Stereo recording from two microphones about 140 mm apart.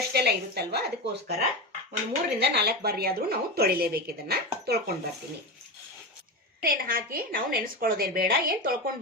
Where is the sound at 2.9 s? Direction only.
90° right.